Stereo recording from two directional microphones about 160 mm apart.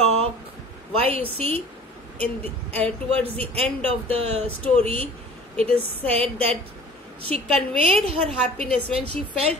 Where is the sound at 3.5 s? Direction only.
40° right (ahead or behind).